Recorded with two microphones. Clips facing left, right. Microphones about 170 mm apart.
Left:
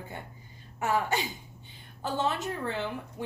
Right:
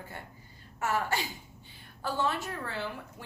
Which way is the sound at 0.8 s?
15° left (ahead or behind).